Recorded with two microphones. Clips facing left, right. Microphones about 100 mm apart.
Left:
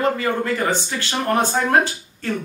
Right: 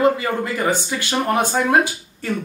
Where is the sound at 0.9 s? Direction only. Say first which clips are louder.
Right 1 dB; 5° right (ahead or behind).